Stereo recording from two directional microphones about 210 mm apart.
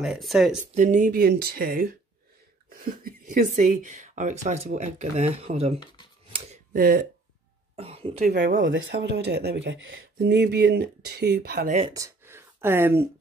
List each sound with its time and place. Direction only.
0.0 s speech: centre (ahead or behind)
0.7 s speech: 35° right (ahead or behind)
6.3 s a sound: 35° right (ahead or behind)
7.7 s cough: 30° right (ahead or behind)
8.2 s speech: 40° right (ahead or behind)
8.5 s speech: 60° right (ahead or behind)
11.9 s a sound: 15° right (ahead or behind)